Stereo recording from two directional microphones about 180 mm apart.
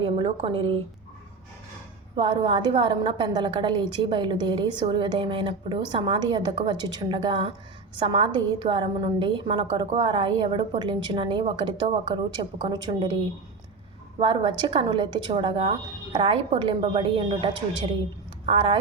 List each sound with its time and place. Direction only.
0.0 s a woman's voice: 30° right (ahead or behind)
2.1 s a woman's voice: 25° right (ahead or behind)
14.2 s a woman's voice: 30° right (ahead or behind)